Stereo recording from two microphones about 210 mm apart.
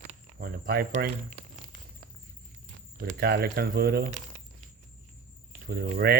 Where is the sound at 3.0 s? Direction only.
45° right (ahead or behind).